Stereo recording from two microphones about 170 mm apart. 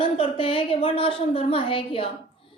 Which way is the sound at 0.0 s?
30° left (ahead or behind).